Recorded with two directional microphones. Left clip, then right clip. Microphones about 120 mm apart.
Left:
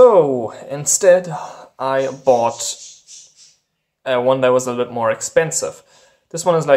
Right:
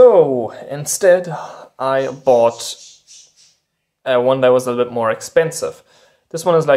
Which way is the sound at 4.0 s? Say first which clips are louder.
Right 2 dB; 20° right (ahead or behind).